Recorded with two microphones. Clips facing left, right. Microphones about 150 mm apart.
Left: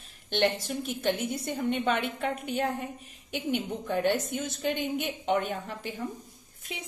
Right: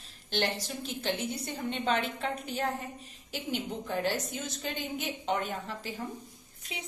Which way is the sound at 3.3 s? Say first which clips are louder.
Left 4 dB; 55° left (ahead or behind).